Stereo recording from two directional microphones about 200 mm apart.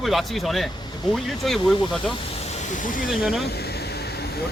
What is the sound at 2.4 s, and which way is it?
Hiss, 35° left (ahead or behind).